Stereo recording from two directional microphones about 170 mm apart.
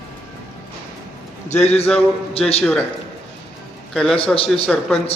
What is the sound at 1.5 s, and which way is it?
Speech, 40° left (ahead or behind).